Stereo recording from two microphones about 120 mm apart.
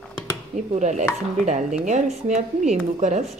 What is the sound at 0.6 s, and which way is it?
Dishes, 90° right.